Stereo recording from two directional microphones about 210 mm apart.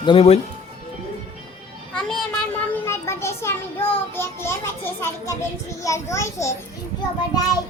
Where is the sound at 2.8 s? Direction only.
10° left (ahead or behind).